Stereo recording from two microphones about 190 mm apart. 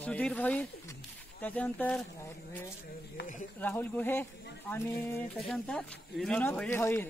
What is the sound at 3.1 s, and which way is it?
Speech, 45° left (ahead or behind).